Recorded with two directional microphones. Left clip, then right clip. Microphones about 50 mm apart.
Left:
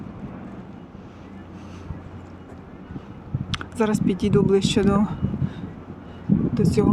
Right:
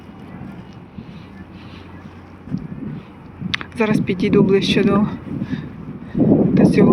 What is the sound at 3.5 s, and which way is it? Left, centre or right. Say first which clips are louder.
Speech: right 5 dB; centre.